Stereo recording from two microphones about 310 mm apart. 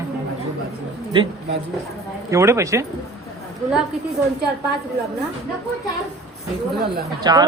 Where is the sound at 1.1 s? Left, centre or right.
Centre.